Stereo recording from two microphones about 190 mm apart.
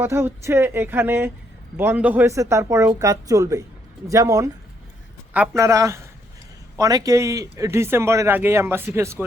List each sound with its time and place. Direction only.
0.0 s speech: 10° right (ahead or behind)